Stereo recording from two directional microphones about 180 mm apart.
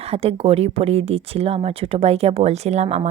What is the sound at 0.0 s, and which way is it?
Speech, 35° right (ahead or behind).